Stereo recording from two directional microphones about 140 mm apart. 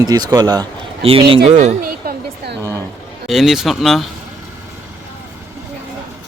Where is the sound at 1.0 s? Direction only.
40° right (ahead or behind).